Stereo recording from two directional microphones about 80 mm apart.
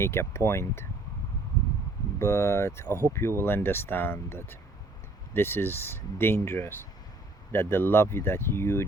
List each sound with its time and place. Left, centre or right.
0.0 s speech: left
2.1 s speech: left